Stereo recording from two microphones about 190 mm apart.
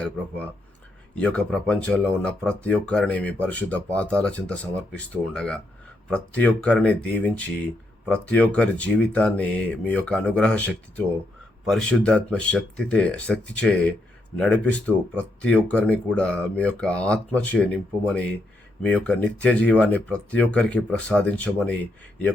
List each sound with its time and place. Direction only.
1.1 s speech: 5° left (ahead or behind)